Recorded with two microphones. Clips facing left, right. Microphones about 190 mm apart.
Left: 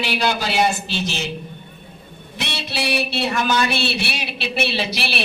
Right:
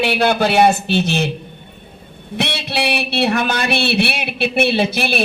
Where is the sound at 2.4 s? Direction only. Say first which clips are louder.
Right 5 dB; 60° right (ahead or behind).